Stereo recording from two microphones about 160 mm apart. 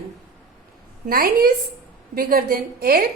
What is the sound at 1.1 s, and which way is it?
A woman's voice, 65° right (ahead or behind).